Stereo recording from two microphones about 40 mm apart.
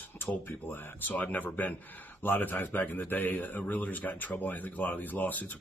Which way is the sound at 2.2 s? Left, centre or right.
Left.